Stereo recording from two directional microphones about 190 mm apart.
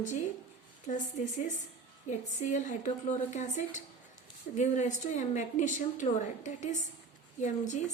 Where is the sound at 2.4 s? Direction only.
40° left (ahead or behind).